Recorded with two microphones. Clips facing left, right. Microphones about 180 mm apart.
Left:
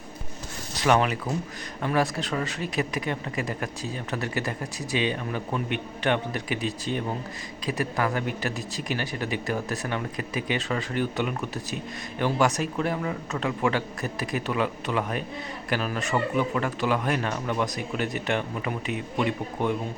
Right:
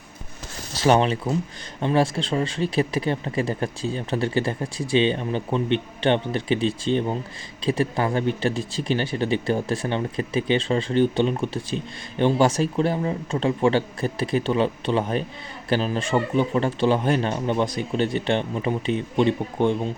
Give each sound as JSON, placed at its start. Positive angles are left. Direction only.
{"t": 0.7, "sound": "speech", "side_deg": -30}